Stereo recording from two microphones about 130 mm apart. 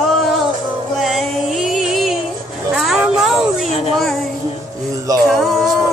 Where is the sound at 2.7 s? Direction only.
5° right (ahead or behind).